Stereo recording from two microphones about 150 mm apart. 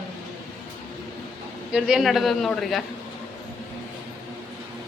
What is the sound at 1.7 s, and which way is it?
A woman's voice, 5° right (ahead or behind).